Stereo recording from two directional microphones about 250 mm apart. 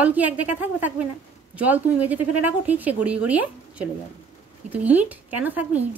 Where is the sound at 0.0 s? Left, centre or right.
Centre.